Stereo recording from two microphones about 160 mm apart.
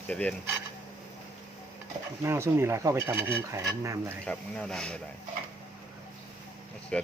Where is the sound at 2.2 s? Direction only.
15° right (ahead or behind).